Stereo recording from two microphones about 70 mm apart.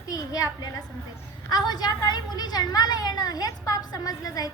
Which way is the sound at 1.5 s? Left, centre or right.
Left.